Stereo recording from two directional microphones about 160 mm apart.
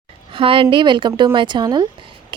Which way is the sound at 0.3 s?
35° right (ahead or behind).